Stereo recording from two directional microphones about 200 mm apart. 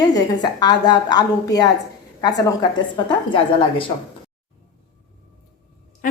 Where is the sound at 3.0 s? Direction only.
25° left (ahead or behind).